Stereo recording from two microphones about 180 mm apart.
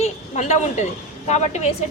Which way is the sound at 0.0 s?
40° left (ahead or behind).